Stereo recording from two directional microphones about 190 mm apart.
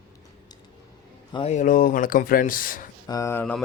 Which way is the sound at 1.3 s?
35° left (ahead or behind).